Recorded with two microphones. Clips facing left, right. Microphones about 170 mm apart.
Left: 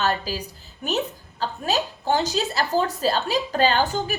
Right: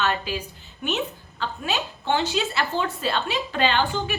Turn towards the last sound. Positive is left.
turn(degrees=40)  # may be behind; listen again after turning